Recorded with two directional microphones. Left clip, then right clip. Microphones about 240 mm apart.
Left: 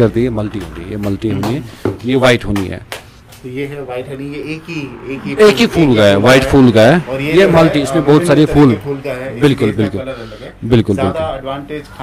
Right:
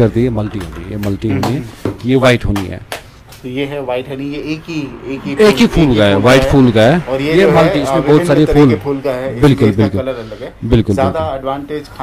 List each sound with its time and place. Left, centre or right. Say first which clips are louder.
0.0 s speech: even; centre